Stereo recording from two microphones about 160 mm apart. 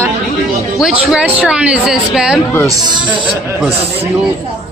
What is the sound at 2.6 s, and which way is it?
Speech, 25° right (ahead or behind).